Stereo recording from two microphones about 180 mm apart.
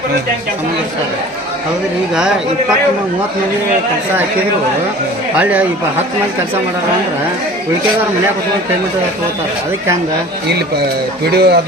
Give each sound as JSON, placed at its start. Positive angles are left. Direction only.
{"t": 2.1, "sound": "speech", "side_deg": -5}
{"t": 5.4, "sound": "speech", "side_deg": -10}
{"t": 11.3, "sound": "speech", "side_deg": -65}